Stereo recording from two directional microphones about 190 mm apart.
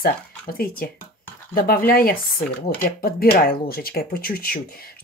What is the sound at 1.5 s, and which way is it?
Speech, 50° left (ahead or behind).